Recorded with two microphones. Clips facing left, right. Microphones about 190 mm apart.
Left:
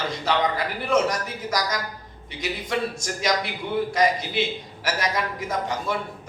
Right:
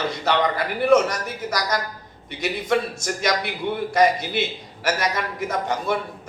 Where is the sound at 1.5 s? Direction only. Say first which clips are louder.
Right 2 dB; 55° right (ahead or behind).